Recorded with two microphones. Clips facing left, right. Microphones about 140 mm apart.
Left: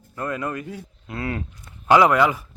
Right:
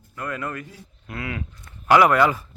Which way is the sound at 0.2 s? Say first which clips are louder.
Left 3 dB; 25° left (ahead or behind).